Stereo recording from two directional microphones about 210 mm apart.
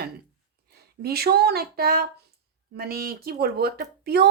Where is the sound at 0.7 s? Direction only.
50° right (ahead or behind).